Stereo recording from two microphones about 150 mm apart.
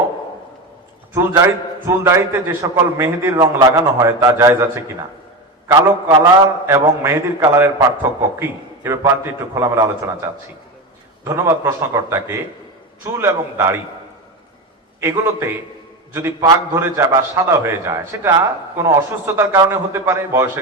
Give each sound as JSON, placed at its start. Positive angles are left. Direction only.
{"t": 1.1, "sound": "a man's voice", "side_deg": -20}
{"t": 16.1, "sound": "a man's voice", "side_deg": -20}